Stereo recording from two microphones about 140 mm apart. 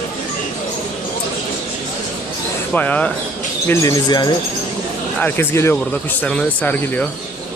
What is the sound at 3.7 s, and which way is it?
Speech, 25° left (ahead or behind).